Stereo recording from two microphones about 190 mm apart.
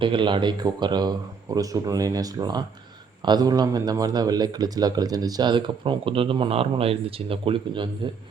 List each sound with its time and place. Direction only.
0.0 s speech: 25° right (ahead or behind)